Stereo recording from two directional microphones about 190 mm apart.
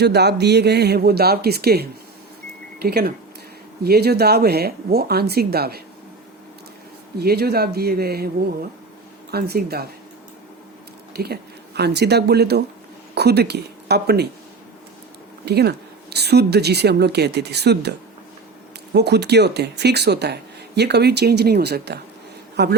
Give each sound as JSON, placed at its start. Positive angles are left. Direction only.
{"t": 0.0, "sound": "speech", "side_deg": -60}
{"t": 7.2, "sound": "speech", "side_deg": -55}
{"t": 9.3, "sound": "speech", "side_deg": -55}
{"t": 11.1, "sound": "speech", "side_deg": -55}
{"t": 15.4, "sound": "speech", "side_deg": -60}
{"t": 18.9, "sound": "speech", "side_deg": -60}